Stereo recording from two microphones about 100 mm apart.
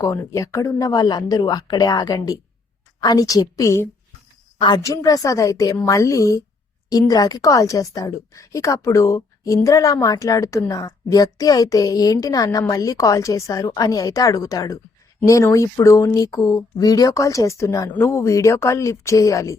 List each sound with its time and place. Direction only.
0.3 s a woman's voice: 35° left (ahead or behind)